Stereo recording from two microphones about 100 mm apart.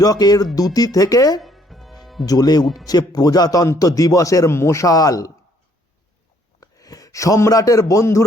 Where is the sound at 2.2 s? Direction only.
40° left (ahead or behind).